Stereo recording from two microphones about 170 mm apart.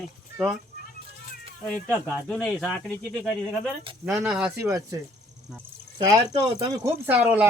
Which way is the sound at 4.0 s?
5° right (ahead or behind).